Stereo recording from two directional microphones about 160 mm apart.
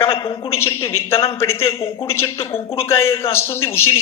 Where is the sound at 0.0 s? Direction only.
15° left (ahead or behind).